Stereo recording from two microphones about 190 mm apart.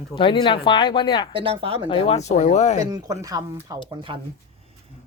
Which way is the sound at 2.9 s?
20° right (ahead or behind).